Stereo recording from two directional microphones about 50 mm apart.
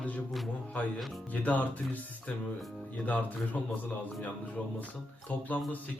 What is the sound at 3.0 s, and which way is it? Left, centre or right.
Speech, left.